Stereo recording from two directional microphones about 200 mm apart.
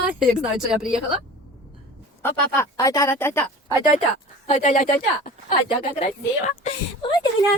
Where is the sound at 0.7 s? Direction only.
5° right (ahead or behind).